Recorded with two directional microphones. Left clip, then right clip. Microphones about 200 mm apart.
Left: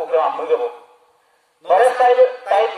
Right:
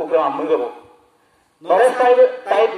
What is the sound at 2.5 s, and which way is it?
Speech, 5° left (ahead or behind).